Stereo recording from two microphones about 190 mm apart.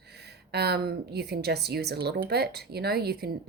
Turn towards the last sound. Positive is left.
turn(degrees=-55)  # may be behind; listen again after turning